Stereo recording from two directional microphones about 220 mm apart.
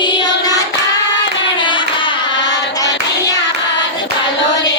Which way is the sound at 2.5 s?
15° left (ahead or behind).